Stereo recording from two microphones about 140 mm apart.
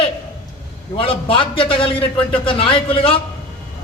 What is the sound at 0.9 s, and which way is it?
A man's voice, 40° left (ahead or behind).